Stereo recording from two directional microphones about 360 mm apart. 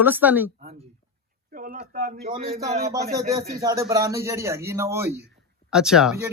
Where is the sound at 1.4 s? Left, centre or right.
Right.